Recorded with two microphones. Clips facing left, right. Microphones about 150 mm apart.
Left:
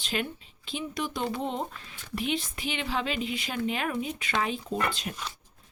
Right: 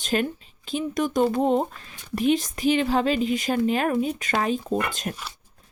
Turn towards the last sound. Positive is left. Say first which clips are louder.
# right 4 dB
turn(degrees=-45)  # may be behind; listen again after turning